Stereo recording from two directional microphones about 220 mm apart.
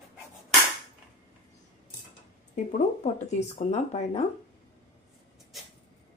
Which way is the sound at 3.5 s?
30° left (ahead or behind).